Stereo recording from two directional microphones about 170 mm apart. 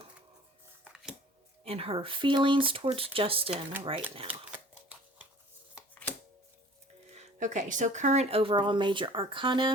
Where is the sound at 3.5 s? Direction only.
10° right (ahead or behind).